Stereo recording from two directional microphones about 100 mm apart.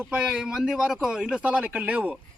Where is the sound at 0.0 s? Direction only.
15° right (ahead or behind).